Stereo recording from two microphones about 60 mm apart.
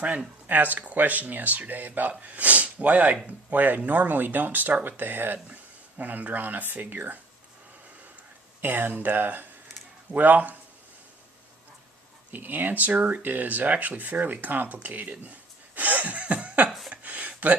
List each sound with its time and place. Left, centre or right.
0.0 s speech: right
8.6 s speech: right
12.3 s speech: right
15.7 s chuckle: right
16.9 s a sound: right